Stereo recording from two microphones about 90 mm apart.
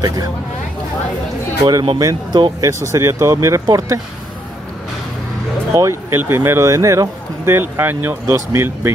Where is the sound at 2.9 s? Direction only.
35° right (ahead or behind).